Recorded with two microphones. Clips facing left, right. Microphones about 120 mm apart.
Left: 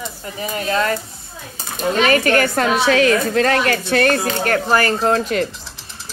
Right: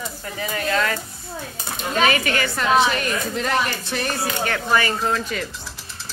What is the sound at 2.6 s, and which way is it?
A woman's voice, 90° left.